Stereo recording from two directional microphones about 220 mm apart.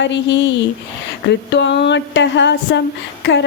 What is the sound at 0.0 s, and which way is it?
Speech, 55° left (ahead or behind).